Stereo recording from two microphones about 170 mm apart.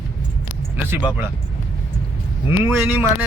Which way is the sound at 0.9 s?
10° right (ahead or behind).